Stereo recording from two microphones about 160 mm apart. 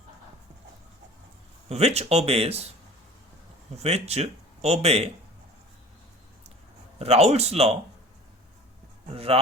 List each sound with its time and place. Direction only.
1.7 s speech: 40° right (ahead or behind)
3.8 s speech: 40° right (ahead or behind)
7.0 s speech: 40° right (ahead or behind)
9.0 s speech: 35° right (ahead or behind)